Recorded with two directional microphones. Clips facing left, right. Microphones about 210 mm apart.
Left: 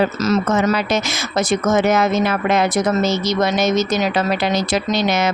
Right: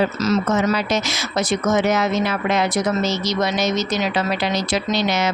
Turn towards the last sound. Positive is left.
turn(degrees=50)  # may be behind; listen again after turning